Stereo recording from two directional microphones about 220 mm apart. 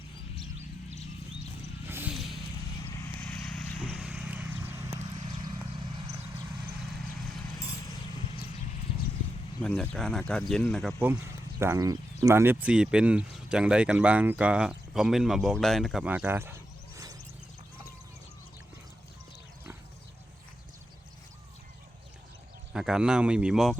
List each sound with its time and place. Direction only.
1.9 s a sound: 5° right (ahead or behind)
2.8 s vehicle: 10° left (ahead or behind); by 4.9 s 10° right (ahead or behind)
4.9 s clip-clop: 25° right (ahead or behind)
9.6 s speech: 5° left (ahead or behind)
11.6 s speech: 15° right (ahead or behind)
22.7 s speech: centre (ahead or behind)